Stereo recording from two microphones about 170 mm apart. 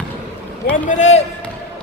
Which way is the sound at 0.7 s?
45° left (ahead or behind).